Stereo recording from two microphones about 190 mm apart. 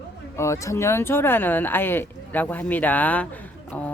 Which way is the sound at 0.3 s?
15° left (ahead or behind).